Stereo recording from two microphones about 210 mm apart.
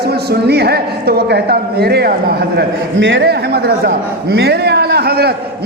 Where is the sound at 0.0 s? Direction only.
50° right (ahead or behind).